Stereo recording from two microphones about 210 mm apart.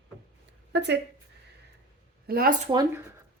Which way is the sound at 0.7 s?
55° right (ahead or behind).